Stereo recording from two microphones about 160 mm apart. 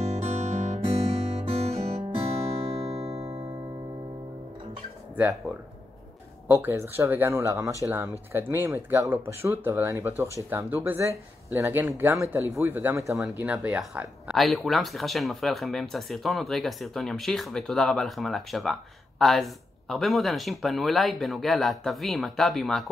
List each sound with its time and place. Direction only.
0.0 s music: 40° right (ahead or behind)
5.1 s speech: 10° right (ahead or behind)
6.4 s speech: 15° right (ahead or behind); by 22.8 s centre (ahead or behind)